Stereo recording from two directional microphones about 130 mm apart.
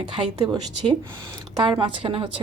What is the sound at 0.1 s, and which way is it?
Speech, 35° right (ahead or behind).